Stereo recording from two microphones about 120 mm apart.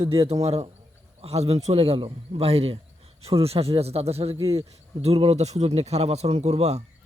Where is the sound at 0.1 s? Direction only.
55° right (ahead or behind).